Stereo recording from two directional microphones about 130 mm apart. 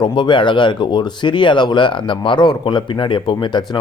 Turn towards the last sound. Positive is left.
turn(degrees=35)  # may be behind; listen again after turning